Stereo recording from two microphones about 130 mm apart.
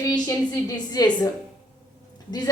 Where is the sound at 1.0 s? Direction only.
30° left (ahead or behind).